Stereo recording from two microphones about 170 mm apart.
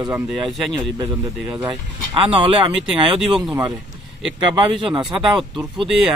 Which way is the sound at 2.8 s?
Centre (ahead or behind).